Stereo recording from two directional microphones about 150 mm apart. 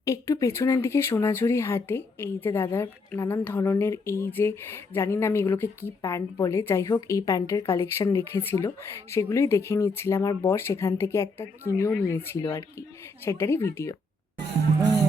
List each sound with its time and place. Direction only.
0.0 s speech: 20° left (ahead or behind)